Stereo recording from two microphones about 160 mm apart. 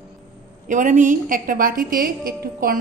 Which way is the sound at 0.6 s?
55° right (ahead or behind).